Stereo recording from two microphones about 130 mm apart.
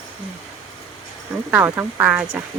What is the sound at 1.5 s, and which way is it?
Speech, 15° right (ahead or behind).